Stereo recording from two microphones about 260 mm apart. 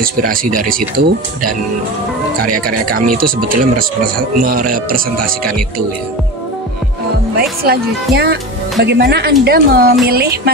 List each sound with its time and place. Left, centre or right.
0.0 s speech: right
7.6 s speech: right